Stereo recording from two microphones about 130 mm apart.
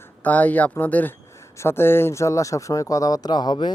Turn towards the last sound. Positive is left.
turn(degrees=35)  # may be behind; listen again after turning